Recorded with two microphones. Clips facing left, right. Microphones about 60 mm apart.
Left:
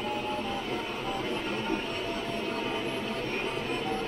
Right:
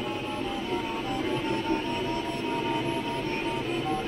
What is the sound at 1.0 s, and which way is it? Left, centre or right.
Music, centre.